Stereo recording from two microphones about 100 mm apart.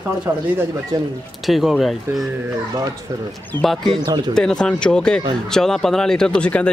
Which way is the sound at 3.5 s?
45° right (ahead or behind).